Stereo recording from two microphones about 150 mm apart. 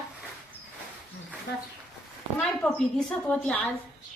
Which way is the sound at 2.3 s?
10° left (ahead or behind).